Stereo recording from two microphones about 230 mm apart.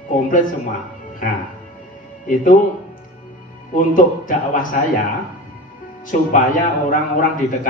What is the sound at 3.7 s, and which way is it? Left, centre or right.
Speech, left.